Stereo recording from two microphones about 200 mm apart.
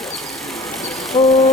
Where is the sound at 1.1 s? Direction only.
30° left (ahead or behind).